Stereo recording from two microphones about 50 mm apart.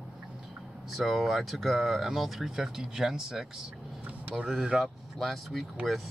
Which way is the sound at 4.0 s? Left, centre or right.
Right.